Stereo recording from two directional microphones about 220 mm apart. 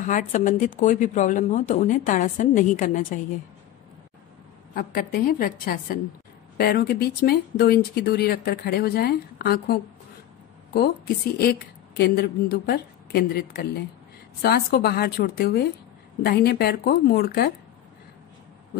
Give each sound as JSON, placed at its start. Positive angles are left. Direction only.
{"t": 0.0, "sound": "speech", "side_deg": 35}
{"t": 4.7, "sound": "speech", "side_deg": 45}
{"t": 12.0, "sound": "speech", "side_deg": 45}